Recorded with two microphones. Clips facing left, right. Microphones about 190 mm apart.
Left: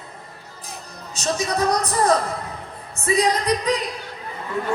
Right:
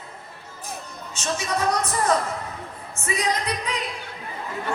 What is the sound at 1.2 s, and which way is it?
Music, 35° left (ahead or behind).